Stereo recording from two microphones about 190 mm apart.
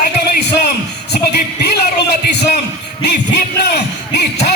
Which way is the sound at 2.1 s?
60° left (ahead or behind).